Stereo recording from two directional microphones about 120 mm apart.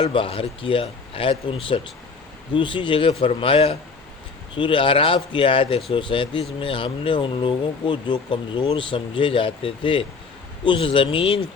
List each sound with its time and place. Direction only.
0.0 s speech: 50° left (ahead or behind)